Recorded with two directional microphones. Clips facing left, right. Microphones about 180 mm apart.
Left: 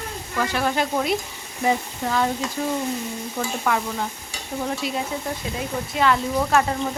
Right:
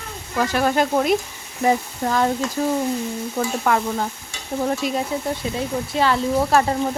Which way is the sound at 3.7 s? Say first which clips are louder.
Right 3 dB; 50° right (ahead or behind).